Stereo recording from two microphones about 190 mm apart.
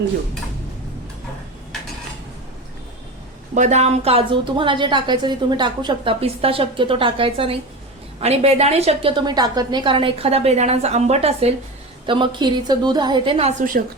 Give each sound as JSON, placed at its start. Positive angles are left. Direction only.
{"t": 3.5, "sound": "a woman's voice", "side_deg": -40}